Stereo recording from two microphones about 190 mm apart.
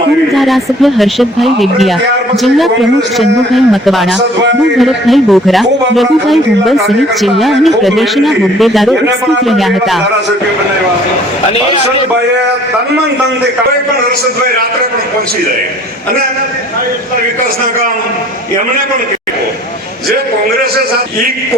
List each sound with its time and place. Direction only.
0.3 s a man's voice: centre (ahead or behind)
3.2 s a man's voice: centre (ahead or behind)